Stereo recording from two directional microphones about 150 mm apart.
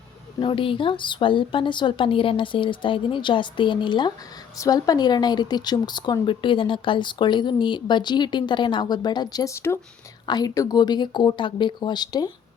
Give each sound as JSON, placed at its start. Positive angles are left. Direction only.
{"t": 0.3, "sound": "speech", "side_deg": 35}